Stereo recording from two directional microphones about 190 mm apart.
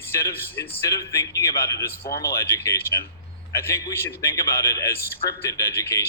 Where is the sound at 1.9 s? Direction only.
55° left (ahead or behind).